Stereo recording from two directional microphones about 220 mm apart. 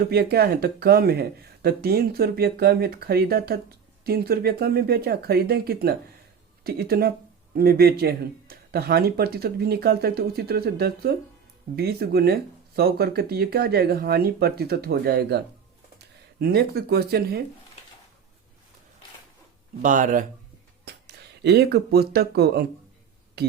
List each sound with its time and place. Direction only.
0.1 s speech: 45° right (ahead or behind)
19.8 s speech: 35° right (ahead or behind)
20.8 s speech: 50° right (ahead or behind)